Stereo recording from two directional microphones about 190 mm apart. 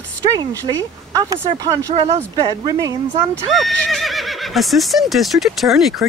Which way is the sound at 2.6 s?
20° right (ahead or behind).